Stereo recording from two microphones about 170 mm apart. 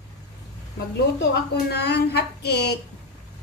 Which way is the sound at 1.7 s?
75° left (ahead or behind).